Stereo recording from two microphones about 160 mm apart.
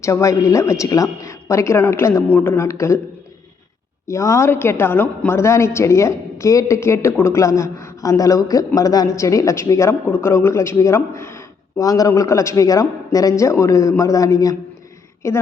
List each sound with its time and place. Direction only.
0.0 s a woman's voice: 20° left (ahead or behind)
4.1 s a woman's voice: 20° left (ahead or behind)